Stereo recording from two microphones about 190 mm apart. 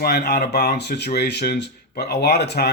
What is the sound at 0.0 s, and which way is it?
Speech, 55° left (ahead or behind).